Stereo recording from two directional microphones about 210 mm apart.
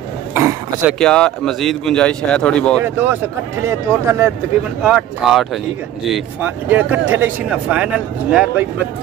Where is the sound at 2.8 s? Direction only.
10° right (ahead or behind).